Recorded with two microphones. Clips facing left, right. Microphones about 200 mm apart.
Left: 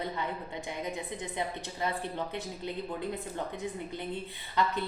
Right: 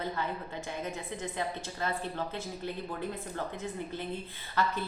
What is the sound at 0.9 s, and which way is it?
A woman's voice, 15° left (ahead or behind).